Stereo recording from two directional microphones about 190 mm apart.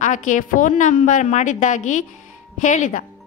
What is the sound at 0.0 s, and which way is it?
A woman's voice, 40° left (ahead or behind).